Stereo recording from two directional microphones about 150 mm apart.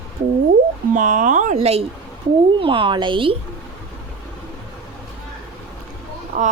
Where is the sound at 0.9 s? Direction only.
60° right (ahead or behind); by 3.3 s 35° right (ahead or behind).